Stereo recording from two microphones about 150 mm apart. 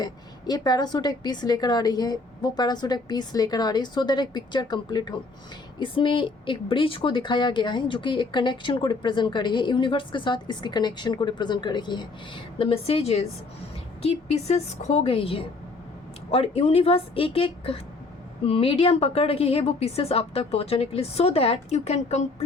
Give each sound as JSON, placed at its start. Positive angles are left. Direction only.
{"t": 0.0, "sound": "a woman's voice", "side_deg": 25}